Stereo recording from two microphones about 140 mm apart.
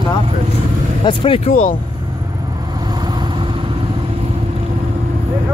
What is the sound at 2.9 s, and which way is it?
Vehicle, 30° right (ahead or behind).